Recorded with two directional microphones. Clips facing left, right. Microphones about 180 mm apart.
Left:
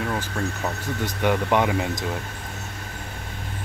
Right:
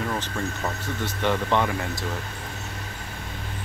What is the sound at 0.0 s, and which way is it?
Speech, 5° left (ahead or behind).